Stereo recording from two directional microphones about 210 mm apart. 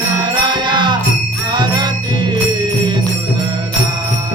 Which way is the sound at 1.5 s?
20° right (ahead or behind).